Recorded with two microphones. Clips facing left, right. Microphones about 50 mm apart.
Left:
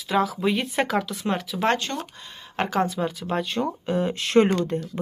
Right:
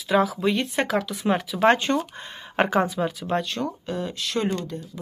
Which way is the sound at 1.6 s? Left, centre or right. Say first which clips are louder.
Right 5 dB; right.